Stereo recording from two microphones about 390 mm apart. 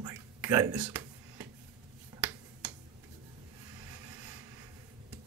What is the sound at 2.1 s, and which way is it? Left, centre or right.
Finger snapping, centre.